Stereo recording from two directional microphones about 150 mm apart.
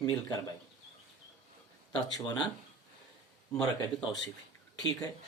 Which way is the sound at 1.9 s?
25° left (ahead or behind).